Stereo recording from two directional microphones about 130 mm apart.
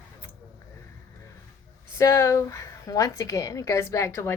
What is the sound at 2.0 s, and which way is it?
Speech, 25° left (ahead or behind).